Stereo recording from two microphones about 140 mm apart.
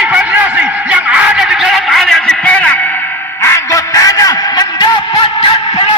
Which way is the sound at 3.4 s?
20° left (ahead or behind).